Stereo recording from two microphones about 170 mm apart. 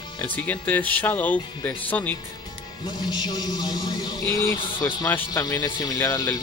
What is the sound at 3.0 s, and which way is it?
A man's voice, 25° left (ahead or behind).